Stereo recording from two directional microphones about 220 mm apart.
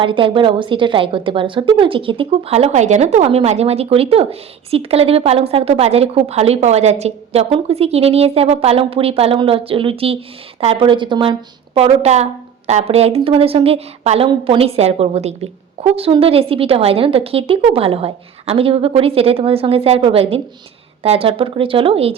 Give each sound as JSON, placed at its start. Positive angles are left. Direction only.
{"t": 0.0, "sound": "a woman's voice", "side_deg": -25}